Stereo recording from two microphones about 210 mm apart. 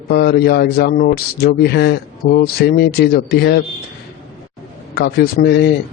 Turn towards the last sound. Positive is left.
turn(degrees=50)  # may be behind; listen again after turning